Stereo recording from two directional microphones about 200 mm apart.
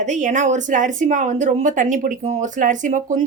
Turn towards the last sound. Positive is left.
turn(degrees=-40)  # may be behind; listen again after turning